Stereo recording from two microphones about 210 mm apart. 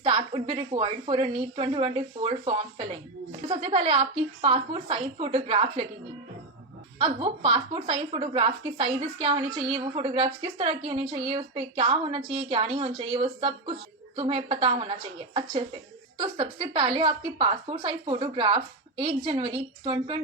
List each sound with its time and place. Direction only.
0.0 s a woman's voice: 25° right (ahead or behind)
7.0 s a woman's voice: 25° right (ahead or behind)